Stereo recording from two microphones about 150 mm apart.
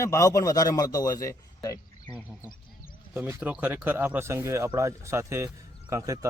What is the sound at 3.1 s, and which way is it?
Speech, 10° right (ahead or behind).